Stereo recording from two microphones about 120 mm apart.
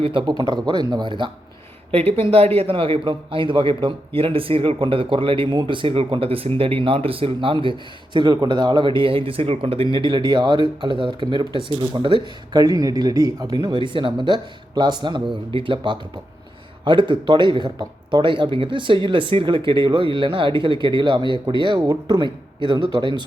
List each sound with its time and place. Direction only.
0.0 s speech: 45° right (ahead or behind)
1.9 s a man's voice: 55° right (ahead or behind)
12.6 s a man's voice: 30° right (ahead or behind)